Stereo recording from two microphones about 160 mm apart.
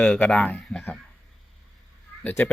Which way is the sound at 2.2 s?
15° left (ahead or behind).